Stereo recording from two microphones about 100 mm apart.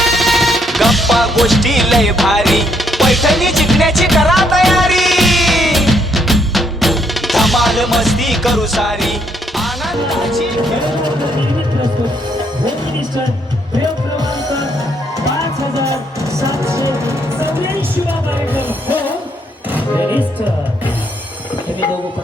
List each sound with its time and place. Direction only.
0.0 s music: centre (ahead or behind)
16.4 s music: 30° right (ahead or behind)
18.5 s music: 20° right (ahead or behind)